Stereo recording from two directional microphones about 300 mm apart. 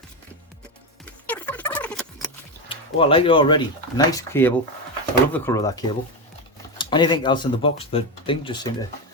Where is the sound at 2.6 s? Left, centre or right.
Centre.